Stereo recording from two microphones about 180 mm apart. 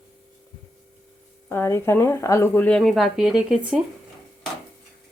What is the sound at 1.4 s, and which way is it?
A woman's voice, 15° left (ahead or behind).